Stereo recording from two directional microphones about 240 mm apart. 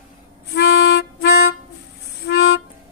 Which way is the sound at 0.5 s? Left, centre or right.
Left.